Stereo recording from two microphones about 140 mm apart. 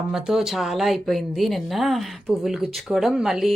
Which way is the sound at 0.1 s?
5° right (ahead or behind).